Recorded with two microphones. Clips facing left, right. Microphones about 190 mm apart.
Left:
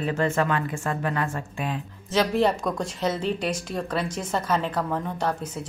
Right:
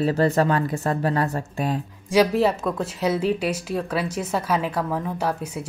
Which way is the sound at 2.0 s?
10° right (ahead or behind).